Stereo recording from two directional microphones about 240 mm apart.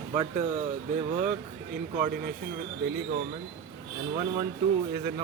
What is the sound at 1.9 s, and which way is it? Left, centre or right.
Speech, right.